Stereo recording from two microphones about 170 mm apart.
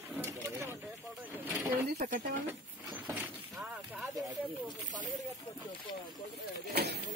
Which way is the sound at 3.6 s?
Centre (ahead or behind).